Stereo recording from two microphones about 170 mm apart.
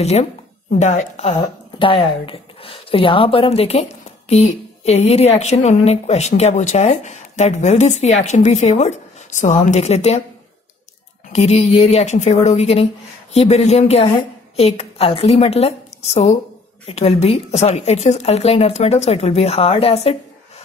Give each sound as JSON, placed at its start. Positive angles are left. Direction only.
{"t": 0.0, "sound": "a woman's voice", "side_deg": 40}
{"t": 11.3, "sound": "a woman's voice", "side_deg": 40}